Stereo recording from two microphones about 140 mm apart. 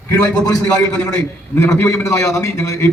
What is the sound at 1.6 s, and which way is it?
A man's voice, 20° left (ahead or behind).